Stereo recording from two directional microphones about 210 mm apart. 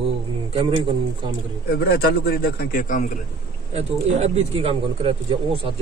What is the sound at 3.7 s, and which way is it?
Speech, 30° right (ahead or behind).